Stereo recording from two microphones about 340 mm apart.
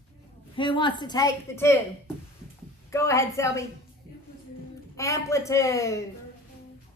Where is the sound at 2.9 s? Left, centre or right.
Centre.